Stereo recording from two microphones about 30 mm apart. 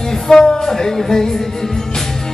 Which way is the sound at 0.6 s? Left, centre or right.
Centre.